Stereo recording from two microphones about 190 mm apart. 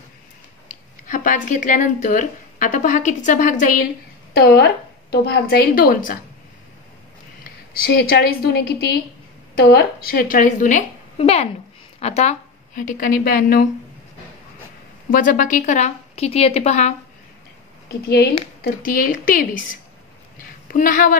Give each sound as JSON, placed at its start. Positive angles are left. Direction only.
{"t": 0.7, "sound": "a woman's voice", "side_deg": 45}
{"t": 4.3, "sound": "a woman's voice", "side_deg": 55}
{"t": 7.9, "sound": "a woman's voice", "side_deg": 55}
{"t": 15.0, "sound": "a woman's voice", "side_deg": 45}
{"t": 18.1, "sound": "a woman's voice", "side_deg": 55}
{"t": 20.7, "sound": "a woman's voice", "side_deg": 45}